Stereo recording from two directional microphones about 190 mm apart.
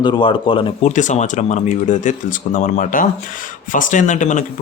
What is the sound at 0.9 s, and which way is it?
Speech, 40° left (ahead or behind).